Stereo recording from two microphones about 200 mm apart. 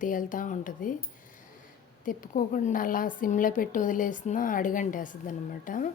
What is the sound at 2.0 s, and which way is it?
A woman's voice, 40° left (ahead or behind).